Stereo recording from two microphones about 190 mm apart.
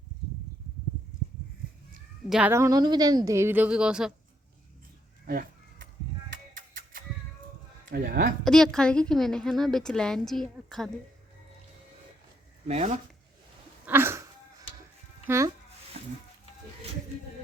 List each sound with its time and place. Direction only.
2.3 s speech: 10° right (ahead or behind)
5.2 s speech: 50° right (ahead or behind)
6.3 s a sound: 50° right (ahead or behind)
7.9 s speech: 55° right (ahead or behind)
8.4 s a woman's voice: 5° left (ahead or behind)
12.6 s speech: 35° right (ahead or behind)
13.8 s a sound: 10° right (ahead or behind)
15.3 s speech: 10° right (ahead or behind)
16.0 s music: 30° right (ahead or behind)